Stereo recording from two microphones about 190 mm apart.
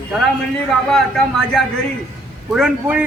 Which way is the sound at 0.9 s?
Centre (ahead or behind).